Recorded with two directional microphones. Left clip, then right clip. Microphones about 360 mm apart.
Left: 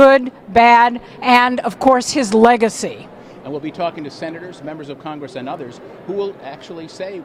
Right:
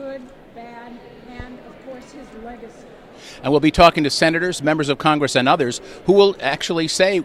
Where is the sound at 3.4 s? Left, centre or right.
Right.